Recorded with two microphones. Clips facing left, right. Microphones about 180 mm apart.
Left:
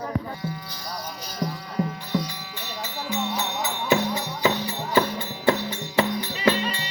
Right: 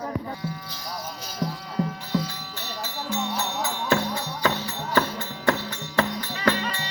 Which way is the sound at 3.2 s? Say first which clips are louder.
Left 1 dB; 5° left (ahead or behind).